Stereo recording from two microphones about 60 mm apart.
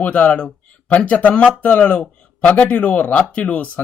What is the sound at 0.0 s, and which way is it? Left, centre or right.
Speech, left.